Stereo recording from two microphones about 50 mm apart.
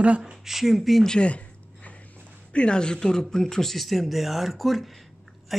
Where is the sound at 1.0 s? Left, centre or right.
Centre.